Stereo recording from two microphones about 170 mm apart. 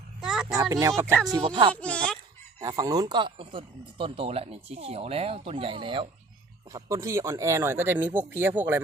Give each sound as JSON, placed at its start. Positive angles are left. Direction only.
{"t": 0.2, "sound": "a sound", "side_deg": -5}
{"t": 0.7, "sound": "speech", "side_deg": -20}
{"t": 1.3, "sound": "speech", "side_deg": -25}
{"t": 1.7, "sound": "speech", "side_deg": 5}
{"t": 2.6, "sound": "speech", "side_deg": -20}
{"t": 6.7, "sound": "speech", "side_deg": -20}